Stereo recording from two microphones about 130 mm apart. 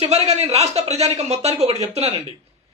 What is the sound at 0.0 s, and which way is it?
A man's voice, 55° right (ahead or behind).